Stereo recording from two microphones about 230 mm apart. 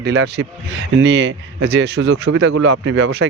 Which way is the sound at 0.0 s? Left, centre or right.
Right.